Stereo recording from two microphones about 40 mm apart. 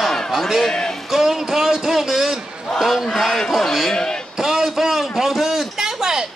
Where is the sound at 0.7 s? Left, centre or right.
Centre.